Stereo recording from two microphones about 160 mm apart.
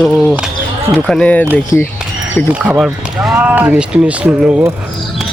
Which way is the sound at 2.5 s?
5° right (ahead or behind).